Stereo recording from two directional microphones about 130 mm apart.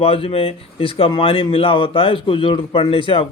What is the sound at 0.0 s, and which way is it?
Speech, 45° left (ahead or behind).